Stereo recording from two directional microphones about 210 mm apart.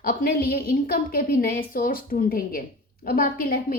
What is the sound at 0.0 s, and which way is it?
A woman's voice, 45° left (ahead or behind).